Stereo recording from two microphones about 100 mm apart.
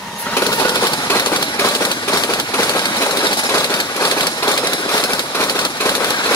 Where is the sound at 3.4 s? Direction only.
35° left (ahead or behind).